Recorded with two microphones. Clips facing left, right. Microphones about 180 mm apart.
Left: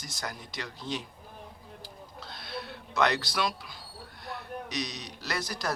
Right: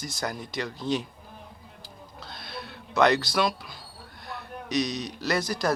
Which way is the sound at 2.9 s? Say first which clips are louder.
Right 6 dB; 60° right (ahead or behind).